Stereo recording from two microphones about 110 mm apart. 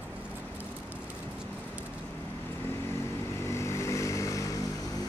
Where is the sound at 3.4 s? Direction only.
25° left (ahead or behind).